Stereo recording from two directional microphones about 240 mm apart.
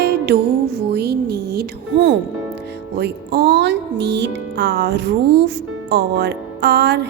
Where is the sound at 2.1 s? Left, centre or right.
Right.